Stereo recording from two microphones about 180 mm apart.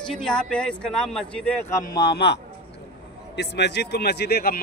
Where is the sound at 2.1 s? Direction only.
65° left (ahead or behind).